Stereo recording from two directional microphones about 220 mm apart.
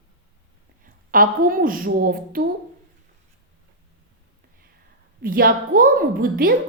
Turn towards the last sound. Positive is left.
turn(degrees=-40)  # may be behind; listen again after turning